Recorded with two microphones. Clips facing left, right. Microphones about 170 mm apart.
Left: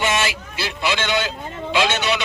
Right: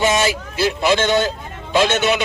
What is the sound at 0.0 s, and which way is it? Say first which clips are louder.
Speech: right 5 dB; 40° right (ahead or behind).